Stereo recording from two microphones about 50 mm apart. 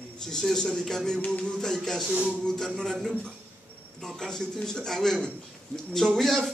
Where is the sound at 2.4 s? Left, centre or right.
Centre.